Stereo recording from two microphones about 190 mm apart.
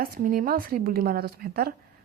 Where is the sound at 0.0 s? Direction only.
50° right (ahead or behind).